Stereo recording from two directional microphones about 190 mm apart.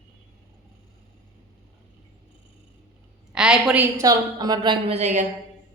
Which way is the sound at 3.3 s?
5° right (ahead or behind).